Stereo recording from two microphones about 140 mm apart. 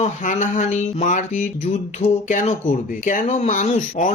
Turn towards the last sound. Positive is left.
turn(degrees=65)  # may be behind; listen again after turning